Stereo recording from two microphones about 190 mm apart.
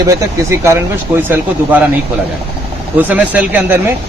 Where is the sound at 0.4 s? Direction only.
15° right (ahead or behind).